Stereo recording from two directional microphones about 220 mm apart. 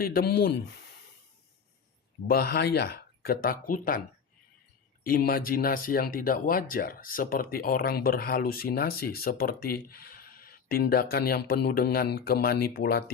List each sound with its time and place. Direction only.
0.0 s speech: 45° left (ahead or behind)
2.2 s speech: 45° left (ahead or behind)
5.0 s speech: 40° left (ahead or behind)